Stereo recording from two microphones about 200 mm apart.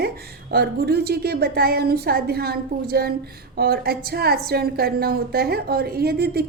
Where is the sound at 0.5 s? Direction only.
55° right (ahead or behind).